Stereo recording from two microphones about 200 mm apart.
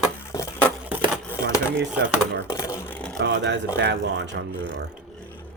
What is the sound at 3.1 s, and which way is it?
Speech, 60° right (ahead or behind).